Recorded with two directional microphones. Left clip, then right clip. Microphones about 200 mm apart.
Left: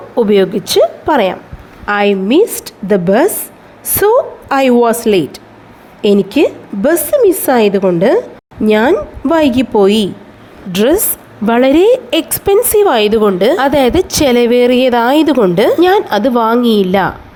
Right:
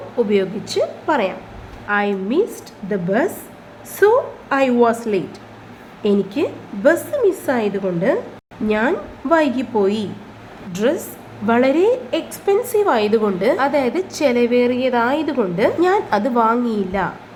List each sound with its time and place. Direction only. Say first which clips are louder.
0.2 s a woman's voice: left 8 dB; 45° left (ahead or behind)